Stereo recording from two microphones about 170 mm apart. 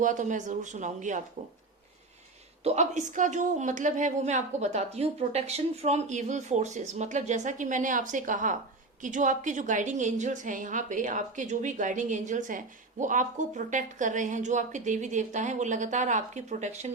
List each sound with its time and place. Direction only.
0.0 s a woman's voice: 45° right (ahead or behind)
2.6 s a woman's voice: 45° right (ahead or behind)